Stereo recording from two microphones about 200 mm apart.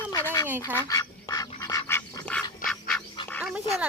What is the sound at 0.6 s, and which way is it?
Duck, 15° left (ahead or behind).